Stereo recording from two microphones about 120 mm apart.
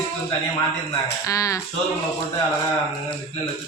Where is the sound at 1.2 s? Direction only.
25° left (ahead or behind).